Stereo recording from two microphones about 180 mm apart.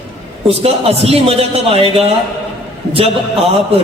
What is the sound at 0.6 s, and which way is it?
A man's voice, 35° right (ahead or behind).